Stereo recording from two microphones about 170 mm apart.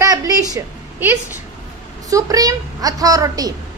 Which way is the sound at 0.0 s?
20° right (ahead or behind).